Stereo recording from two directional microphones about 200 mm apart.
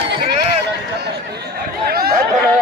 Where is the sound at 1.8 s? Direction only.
50° right (ahead or behind).